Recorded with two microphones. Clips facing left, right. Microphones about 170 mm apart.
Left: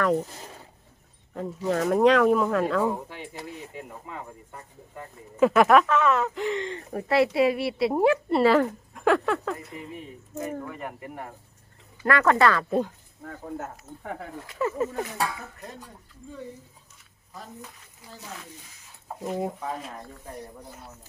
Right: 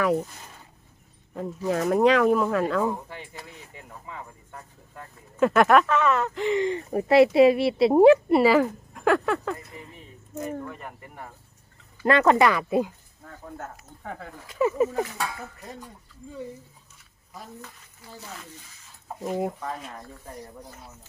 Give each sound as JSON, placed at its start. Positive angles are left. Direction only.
{"t": 0.0, "sound": "speech", "side_deg": -5}
{"t": 1.4, "sound": "speech", "side_deg": 0}
{"t": 5.4, "sound": "speech", "side_deg": 0}
{"t": 6.6, "sound": "speech", "side_deg": -15}
{"t": 8.3, "sound": "speech", "side_deg": -5}
{"t": 12.0, "sound": "speech", "side_deg": -20}
{"t": 14.6, "sound": "speech", "side_deg": -15}
{"t": 19.2, "sound": "speech", "side_deg": 0}